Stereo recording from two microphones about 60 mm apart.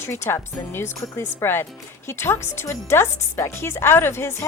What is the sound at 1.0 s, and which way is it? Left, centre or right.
Speech, left.